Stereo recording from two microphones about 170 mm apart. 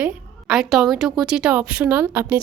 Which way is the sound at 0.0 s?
5° right (ahead or behind).